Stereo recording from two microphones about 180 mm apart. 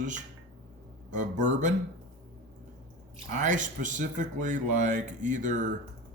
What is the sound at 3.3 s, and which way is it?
Speech, 45° right (ahead or behind).